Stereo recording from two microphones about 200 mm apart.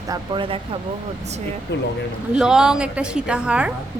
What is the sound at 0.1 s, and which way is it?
Speech, 25° right (ahead or behind).